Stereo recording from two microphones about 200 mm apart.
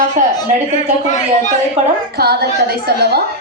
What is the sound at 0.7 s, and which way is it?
Speech, 35° left (ahead or behind).